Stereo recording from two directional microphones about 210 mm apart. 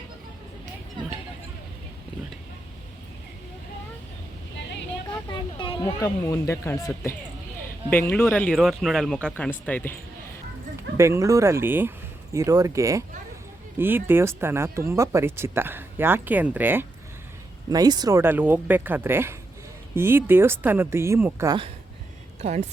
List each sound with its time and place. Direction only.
5.3 s speech: 20° left (ahead or behind)
10.9 s speech: 15° right (ahead or behind)
17.7 s speech: 20° right (ahead or behind)
22.4 s speech: 35° right (ahead or behind)